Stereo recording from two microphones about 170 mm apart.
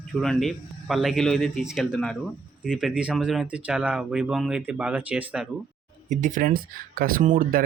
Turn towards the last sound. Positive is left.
turn(degrees=-60)  # may be behind; listen again after turning